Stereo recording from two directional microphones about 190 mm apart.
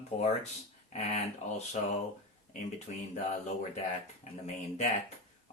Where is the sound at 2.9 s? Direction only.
40° left (ahead or behind).